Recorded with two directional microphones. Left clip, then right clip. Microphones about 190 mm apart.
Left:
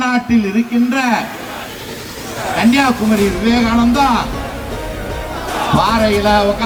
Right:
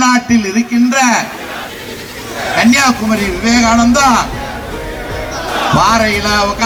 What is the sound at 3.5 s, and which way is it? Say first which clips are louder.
Speech: right 7 dB; 45° left (ahead or behind).